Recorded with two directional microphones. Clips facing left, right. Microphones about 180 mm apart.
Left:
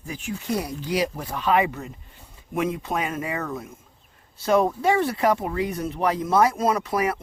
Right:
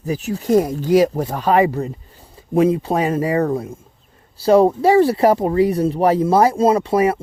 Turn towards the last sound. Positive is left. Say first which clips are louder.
# right 8 dB
turn(degrees=-30)  # may be behind; listen again after turning